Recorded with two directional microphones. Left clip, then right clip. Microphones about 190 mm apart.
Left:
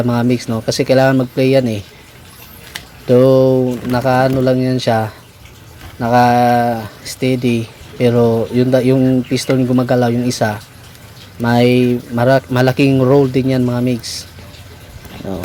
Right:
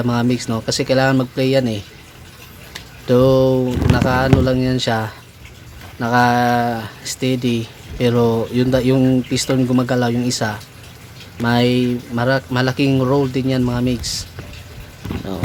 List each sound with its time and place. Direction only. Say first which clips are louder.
0.0 s speech: left 3 dB; 15° left (ahead or behind)
3.1 s speech: left 4 dB; 10° left (ahead or behind)